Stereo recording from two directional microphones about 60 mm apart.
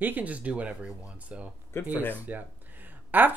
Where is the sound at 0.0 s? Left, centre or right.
Right.